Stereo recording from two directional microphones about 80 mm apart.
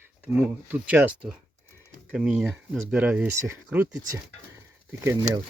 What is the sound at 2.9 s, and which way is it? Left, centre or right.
Speech, centre.